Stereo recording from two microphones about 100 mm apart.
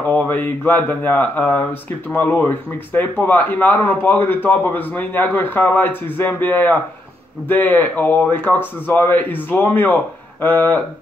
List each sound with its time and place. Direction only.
0.1 s speech: 15° left (ahead or behind)